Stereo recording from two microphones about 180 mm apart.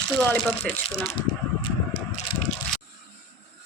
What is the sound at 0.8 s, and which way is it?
Speech, 35° left (ahead or behind).